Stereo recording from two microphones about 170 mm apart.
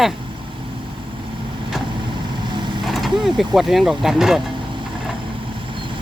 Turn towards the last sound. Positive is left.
turn(degrees=0)  # may be behind; listen again after turning